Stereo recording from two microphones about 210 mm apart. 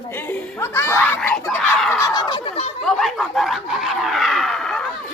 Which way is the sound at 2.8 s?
Centre (ahead or behind).